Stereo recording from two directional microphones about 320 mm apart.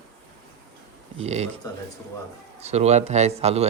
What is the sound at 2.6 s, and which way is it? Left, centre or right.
Speech, centre.